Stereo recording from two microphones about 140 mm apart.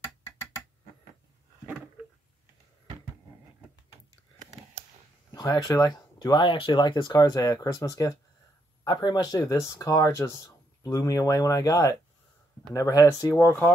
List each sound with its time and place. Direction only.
5.3 s speech: 25° left (ahead or behind)